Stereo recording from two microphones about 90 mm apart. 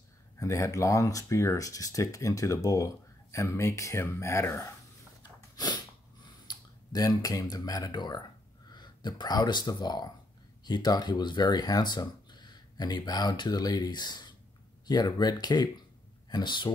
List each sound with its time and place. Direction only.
0.4 s speech: 35° left (ahead or behind)
6.5 s a sound: 50° left (ahead or behind)
6.9 s speech: 45° left (ahead or behind)